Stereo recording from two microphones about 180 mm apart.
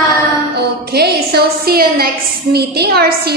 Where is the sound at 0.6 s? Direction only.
65° right (ahead or behind).